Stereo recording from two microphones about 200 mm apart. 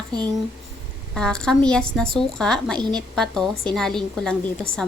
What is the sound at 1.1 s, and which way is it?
A woman's voice, 5° left (ahead or behind).